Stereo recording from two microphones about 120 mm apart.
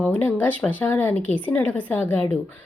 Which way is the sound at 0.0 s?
15° left (ahead or behind).